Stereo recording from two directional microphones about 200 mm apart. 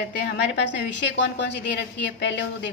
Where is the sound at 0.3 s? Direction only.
55° left (ahead or behind).